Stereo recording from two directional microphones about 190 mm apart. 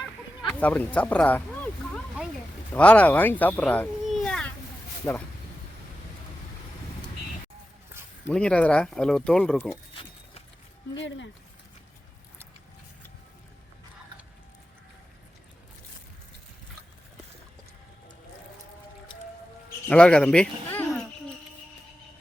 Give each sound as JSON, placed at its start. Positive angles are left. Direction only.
{"t": 0.0, "sound": "a sound", "side_deg": 5}
{"t": 2.7, "sound": "speech", "side_deg": 5}
{"t": 8.3, "sound": "speech", "side_deg": 5}
{"t": 9.9, "sound": "a sound", "side_deg": 30}
{"t": 10.9, "sound": "speech", "side_deg": 75}
{"t": 19.9, "sound": "speech", "side_deg": 5}